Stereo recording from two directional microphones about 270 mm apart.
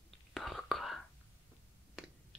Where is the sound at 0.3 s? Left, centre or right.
Centre.